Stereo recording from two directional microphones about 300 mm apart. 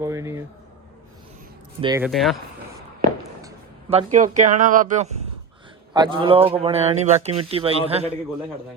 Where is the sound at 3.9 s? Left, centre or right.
Right.